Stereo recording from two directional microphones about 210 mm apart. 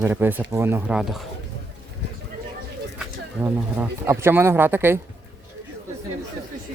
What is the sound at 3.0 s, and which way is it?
Speech, 10° right (ahead or behind).